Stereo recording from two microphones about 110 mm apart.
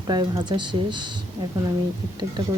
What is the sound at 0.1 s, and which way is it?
Speech, 40° right (ahead or behind).